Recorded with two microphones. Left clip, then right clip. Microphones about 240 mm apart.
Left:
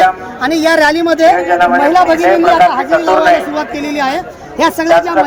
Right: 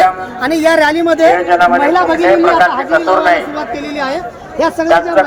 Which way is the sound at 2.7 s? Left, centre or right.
Left.